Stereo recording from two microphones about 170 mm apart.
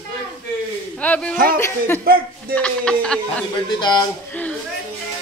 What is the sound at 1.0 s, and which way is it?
Speech, 5° left (ahead or behind).